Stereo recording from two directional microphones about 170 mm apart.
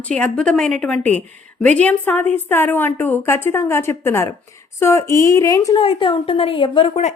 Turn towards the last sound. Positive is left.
turn(degrees=30)  # may be behind; listen again after turning